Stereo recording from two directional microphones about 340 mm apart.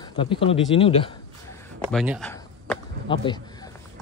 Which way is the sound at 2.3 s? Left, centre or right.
Centre.